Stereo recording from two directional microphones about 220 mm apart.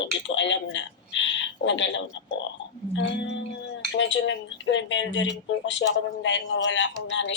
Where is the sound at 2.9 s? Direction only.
55° left (ahead or behind).